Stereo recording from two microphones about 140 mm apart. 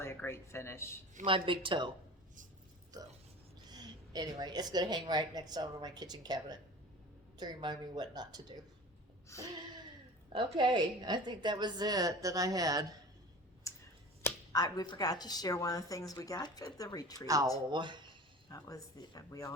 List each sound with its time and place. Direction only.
0.0 s speech: 15° left (ahead or behind)
1.2 s speech: 35° right (ahead or behind)
3.7 s a woman's voice: 30° right (ahead or behind)
9.3 s speech: 20° left (ahead or behind)
10.3 s a woman's voice: 30° right (ahead or behind)
13.7 s a sound: 20° left (ahead or behind)
14.2 s speech: 20° left (ahead or behind)
17.7 s speech: 35° right (ahead or behind)
18.4 s speech: 25° left (ahead or behind)